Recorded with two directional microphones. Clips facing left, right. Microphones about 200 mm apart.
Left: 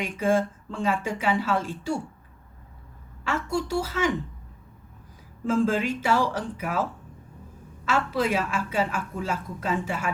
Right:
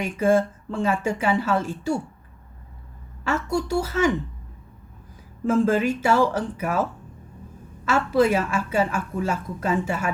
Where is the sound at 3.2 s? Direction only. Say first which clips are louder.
Right 3 dB; 45° right (ahead or behind).